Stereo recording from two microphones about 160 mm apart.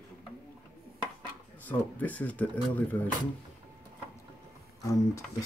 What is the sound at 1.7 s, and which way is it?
Speech, 10° left (ahead or behind).